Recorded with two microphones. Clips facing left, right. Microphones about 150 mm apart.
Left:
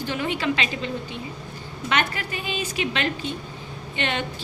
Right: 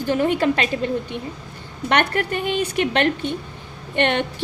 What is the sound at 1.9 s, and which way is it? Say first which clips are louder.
A woman's voice: right 6 dB; 60° right (ahead or behind).